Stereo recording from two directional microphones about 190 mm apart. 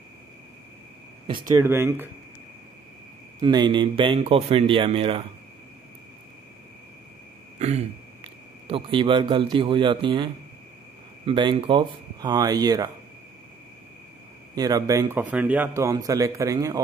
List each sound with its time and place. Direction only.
1.5 s a man's voice: 15° right (ahead or behind)
3.3 s speech: 20° right (ahead or behind)
7.5 s a man's voice: 35° right (ahead or behind)
14.5 s a man's voice: 20° right (ahead or behind)